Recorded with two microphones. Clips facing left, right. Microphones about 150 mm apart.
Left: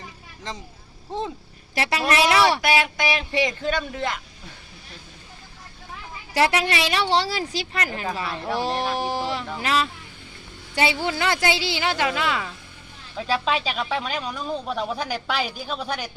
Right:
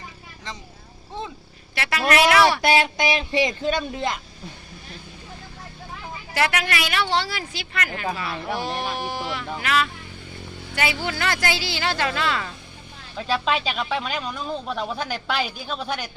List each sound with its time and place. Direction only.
1.7 s a woman's voice: 30° left (ahead or behind)
2.6 s speech: 25° right (ahead or behind)
6.3 s a woman's voice: 30° left (ahead or behind); by 12.5 s 15° left (ahead or behind)
13.1 s speech: 5° left (ahead or behind)